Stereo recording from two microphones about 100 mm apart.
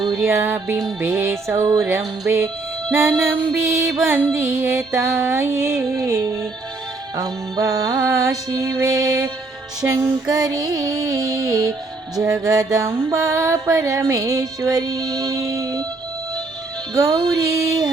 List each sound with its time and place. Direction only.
0.2 s music: 25° right (ahead or behind)
16.9 s music: 35° right (ahead or behind)